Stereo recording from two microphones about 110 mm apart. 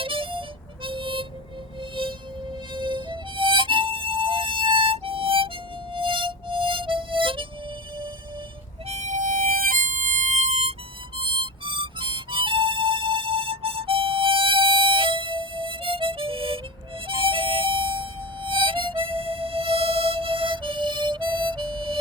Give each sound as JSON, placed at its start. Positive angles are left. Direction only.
{"t": 0.0, "sound": "harmonica", "side_deg": -55}
{"t": 8.9, "sound": "music", "side_deg": -90}
{"t": 10.3, "sound": "harmonica", "side_deg": -75}
{"t": 11.2, "sound": "harmonica", "side_deg": -50}